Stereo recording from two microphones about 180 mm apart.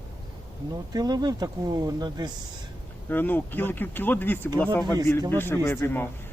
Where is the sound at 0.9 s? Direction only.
20° right (ahead or behind).